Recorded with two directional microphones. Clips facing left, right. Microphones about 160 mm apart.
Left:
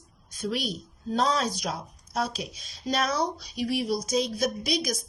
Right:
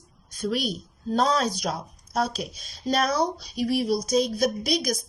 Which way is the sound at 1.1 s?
40° right (ahead or behind).